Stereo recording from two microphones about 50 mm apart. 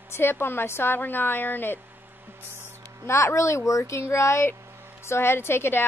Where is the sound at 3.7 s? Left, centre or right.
Left.